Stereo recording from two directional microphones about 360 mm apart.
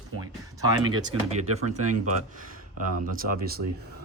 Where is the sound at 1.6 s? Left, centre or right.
Right.